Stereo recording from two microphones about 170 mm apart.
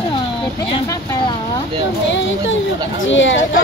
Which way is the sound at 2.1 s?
90° left.